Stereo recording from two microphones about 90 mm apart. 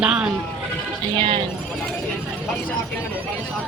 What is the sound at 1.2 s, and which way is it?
Speech, 70° right (ahead or behind).